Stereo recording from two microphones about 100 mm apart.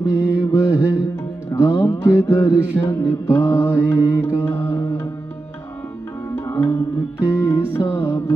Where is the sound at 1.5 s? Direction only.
30° left (ahead or behind).